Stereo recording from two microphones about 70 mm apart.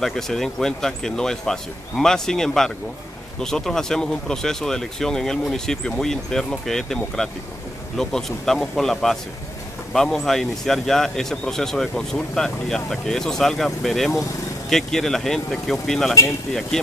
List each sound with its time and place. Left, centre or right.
0.0 s speech: centre